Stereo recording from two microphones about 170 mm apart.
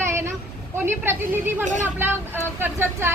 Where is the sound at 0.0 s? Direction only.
15° right (ahead or behind).